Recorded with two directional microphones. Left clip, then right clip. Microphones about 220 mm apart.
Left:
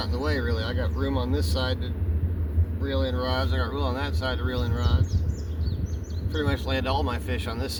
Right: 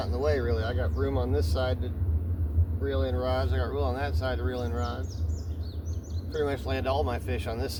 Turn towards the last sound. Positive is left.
turn(degrees=-25)  # may be behind; listen again after turning